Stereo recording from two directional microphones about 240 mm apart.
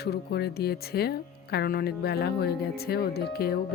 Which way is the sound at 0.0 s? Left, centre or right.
Left.